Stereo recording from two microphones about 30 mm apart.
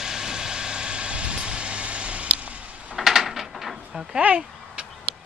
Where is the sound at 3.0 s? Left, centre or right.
Centre.